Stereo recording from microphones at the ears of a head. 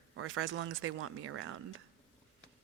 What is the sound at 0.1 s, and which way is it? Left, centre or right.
Speech, right.